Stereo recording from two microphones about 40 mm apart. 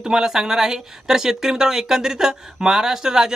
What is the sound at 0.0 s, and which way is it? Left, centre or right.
Speech, centre.